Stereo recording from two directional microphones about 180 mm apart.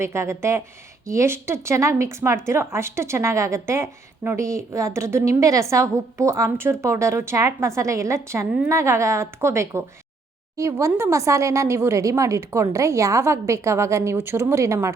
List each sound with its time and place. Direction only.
0.0 s speech: 15° right (ahead or behind)